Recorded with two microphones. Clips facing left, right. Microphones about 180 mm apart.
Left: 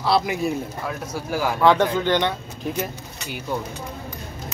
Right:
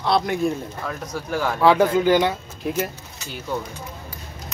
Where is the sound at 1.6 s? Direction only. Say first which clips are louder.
Right 2 dB; 5° right (ahead or behind).